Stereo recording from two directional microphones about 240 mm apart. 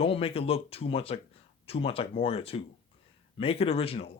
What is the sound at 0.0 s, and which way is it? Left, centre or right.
Speech, left.